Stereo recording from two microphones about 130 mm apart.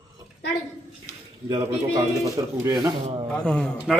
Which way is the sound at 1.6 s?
25° right (ahead or behind).